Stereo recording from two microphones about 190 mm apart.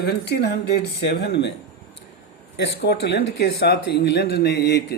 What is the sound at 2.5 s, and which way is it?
Speech, 60° left (ahead or behind).